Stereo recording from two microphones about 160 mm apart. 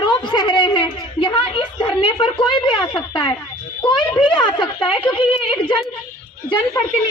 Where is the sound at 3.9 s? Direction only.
30° left (ahead or behind).